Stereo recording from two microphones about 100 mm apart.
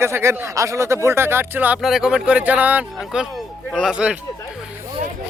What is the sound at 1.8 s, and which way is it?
Speech, 5° right (ahead or behind).